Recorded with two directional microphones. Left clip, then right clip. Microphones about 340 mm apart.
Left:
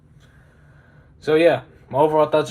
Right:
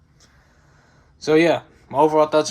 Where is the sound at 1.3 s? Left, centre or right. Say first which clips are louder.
Left 1 dB; right.